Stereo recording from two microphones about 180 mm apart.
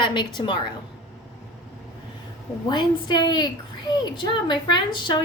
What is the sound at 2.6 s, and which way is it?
A woman's voice, 25° left (ahead or behind).